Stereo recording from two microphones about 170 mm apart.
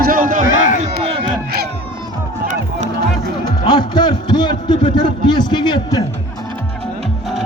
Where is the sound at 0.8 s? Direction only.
35° right (ahead or behind).